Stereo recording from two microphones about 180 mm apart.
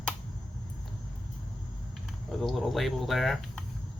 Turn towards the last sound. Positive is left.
turn(degrees=0)  # may be behind; listen again after turning